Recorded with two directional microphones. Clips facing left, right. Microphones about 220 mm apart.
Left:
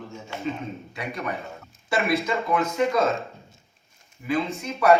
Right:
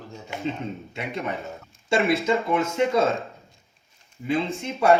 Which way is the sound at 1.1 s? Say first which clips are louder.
Right 1 dB; 25° right (ahead or behind).